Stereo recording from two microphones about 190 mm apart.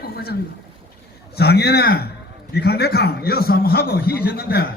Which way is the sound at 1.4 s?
60° left (ahead or behind).